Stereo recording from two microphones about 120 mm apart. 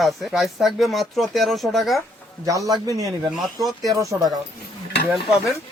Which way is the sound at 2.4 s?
30° right (ahead or behind).